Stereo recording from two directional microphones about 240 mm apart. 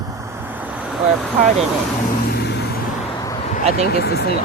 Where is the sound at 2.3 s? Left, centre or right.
Left.